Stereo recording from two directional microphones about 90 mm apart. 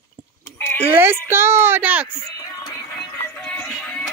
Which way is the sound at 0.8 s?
25° right (ahead or behind).